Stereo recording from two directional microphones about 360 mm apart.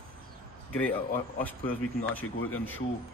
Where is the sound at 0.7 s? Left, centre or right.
Centre.